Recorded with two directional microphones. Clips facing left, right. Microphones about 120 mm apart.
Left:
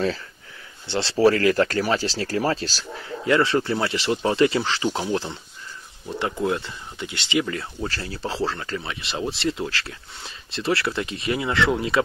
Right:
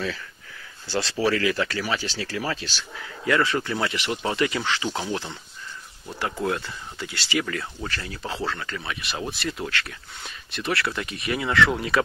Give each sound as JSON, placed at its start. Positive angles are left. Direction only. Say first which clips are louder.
{"t": 0.8, "sound": "speech", "louder": "left 1 dB", "side_deg": 25}
{"t": 1.1, "sound": "speech", "louder": "left 7 dB", "side_deg": 40}
{"t": 4.8, "sound": "speech", "louder": "left 4 dB", "side_deg": 15}
{"t": 5.1, "sound": "speech", "louder": "left 4 dB", "side_deg": 30}
{"t": 6.4, "sound": "speech", "louder": "left 1 dB", "side_deg": 20}